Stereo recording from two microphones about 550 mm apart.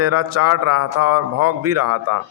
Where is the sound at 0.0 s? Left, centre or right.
Right.